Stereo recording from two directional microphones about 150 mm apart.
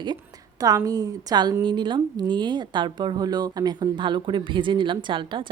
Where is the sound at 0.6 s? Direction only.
25° right (ahead or behind).